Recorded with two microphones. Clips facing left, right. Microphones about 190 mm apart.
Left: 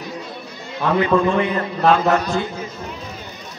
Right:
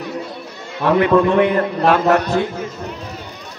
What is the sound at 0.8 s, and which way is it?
A man's voice, 60° right (ahead or behind).